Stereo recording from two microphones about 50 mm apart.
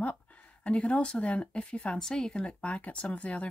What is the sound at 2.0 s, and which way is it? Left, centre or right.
Speech, centre.